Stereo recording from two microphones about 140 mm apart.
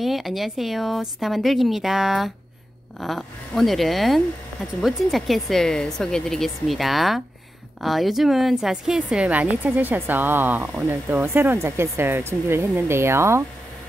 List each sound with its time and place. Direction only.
0.0 s a woman's voice: centre (ahead or behind); by 13.4 s 20° right (ahead or behind)